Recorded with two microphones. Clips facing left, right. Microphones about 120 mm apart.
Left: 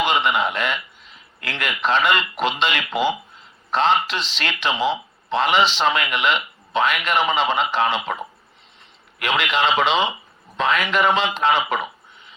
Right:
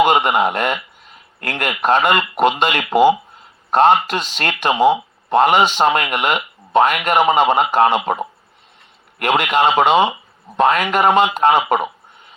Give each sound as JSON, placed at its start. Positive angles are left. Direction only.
{"t": 0.0, "sound": "speech", "side_deg": -50}